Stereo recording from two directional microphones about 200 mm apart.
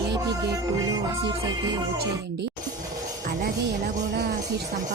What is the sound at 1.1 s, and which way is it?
Music, 20° right (ahead or behind).